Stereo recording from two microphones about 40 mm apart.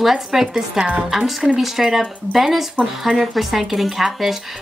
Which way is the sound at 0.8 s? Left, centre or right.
Right.